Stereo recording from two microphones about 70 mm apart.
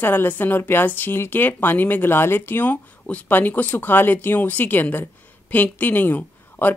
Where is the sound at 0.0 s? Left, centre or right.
Left.